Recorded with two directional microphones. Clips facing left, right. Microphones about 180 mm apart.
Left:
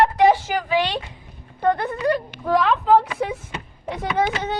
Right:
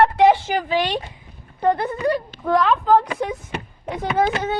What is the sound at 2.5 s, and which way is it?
Speech, 5° left (ahead or behind).